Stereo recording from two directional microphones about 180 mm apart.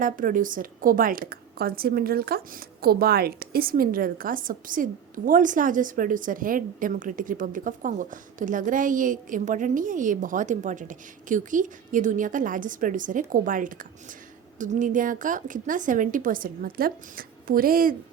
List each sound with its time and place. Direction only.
0.0 s a woman's voice: 50° right (ahead or behind)